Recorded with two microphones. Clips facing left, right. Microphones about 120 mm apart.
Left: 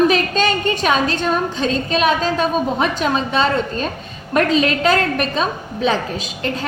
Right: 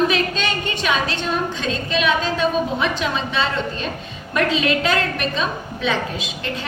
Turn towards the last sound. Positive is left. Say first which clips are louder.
# left 4 dB
turn(degrees=40)  # may be behind; listen again after turning